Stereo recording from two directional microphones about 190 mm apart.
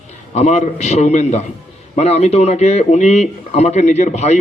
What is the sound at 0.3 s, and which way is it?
A man's voice, 35° left (ahead or behind).